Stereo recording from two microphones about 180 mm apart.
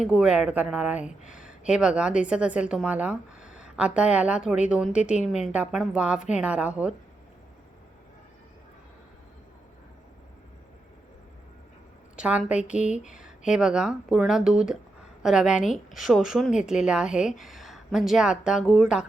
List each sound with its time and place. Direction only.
0.1 s a woman's voice: 5° right (ahead or behind)
5.3 s a woman's voice: 40° left (ahead or behind)
5.5 s a woman's voice: 5° right (ahead or behind)
12.1 s a sound: 5° right (ahead or behind)
12.5 s a woman's voice: 5° right (ahead or behind)